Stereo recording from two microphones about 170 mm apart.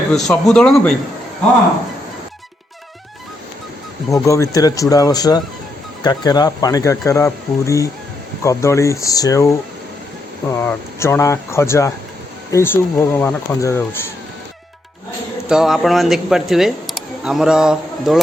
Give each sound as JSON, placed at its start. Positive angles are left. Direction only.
{"t": 0.1, "sound": "speech", "side_deg": 5}
{"t": 4.1, "sound": "speech", "side_deg": 20}
{"t": 10.6, "sound": "speech", "side_deg": 15}
{"t": 15.4, "sound": "speech", "side_deg": -5}